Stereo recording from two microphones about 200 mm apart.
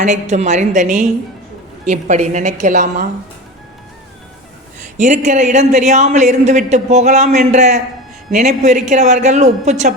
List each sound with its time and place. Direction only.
0.0 s speech: 35° right (ahead or behind)
4.9 s speech: 35° right (ahead or behind)